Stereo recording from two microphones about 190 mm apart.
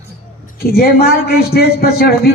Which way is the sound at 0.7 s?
55° left (ahead or behind).